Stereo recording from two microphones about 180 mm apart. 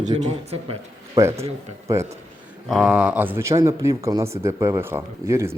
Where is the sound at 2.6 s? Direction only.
5° right (ahead or behind).